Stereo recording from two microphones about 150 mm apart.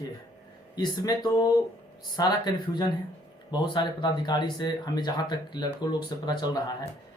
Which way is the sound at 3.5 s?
30° left (ahead or behind).